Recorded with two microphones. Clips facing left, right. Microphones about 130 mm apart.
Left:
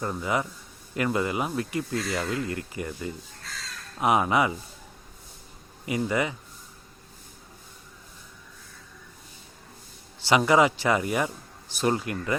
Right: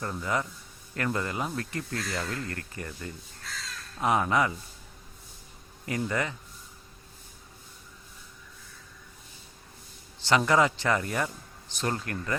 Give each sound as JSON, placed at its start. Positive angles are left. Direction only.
{"t": 0.0, "sound": "speech", "side_deg": 10}
{"t": 5.8, "sound": "speech", "side_deg": 10}
{"t": 10.2, "sound": "speech", "side_deg": 10}